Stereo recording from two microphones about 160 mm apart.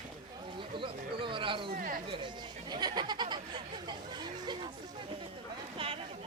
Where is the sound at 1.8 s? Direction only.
60° right (ahead or behind).